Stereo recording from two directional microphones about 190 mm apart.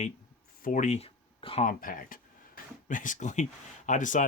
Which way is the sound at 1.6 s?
45° left (ahead or behind).